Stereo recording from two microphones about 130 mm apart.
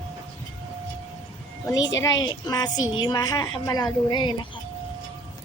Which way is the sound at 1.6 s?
25° left (ahead or behind).